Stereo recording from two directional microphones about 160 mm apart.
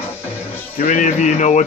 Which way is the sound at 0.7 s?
50° left (ahead or behind).